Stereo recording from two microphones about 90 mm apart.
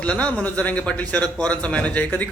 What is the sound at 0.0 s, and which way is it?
A man's voice, 15° left (ahead or behind).